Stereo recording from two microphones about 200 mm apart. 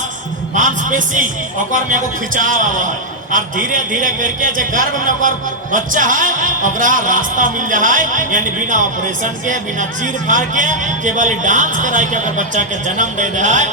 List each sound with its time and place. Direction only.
0.5 s speech: 40° right (ahead or behind)